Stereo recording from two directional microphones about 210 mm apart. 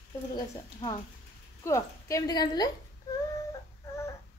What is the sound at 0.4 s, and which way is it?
A woman's voice, 20° left (ahead or behind).